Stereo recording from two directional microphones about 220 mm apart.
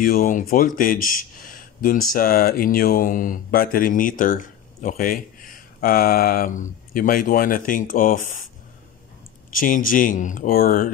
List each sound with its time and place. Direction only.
0.0 s speech: 40° left (ahead or behind)
9.6 s speech: 40° left (ahead or behind)